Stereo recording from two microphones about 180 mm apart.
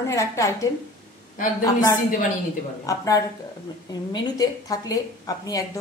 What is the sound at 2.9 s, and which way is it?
A woman's voice, 20° left (ahead or behind).